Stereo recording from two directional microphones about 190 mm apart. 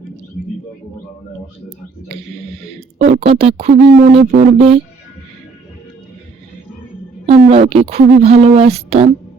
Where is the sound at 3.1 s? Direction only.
30° right (ahead or behind).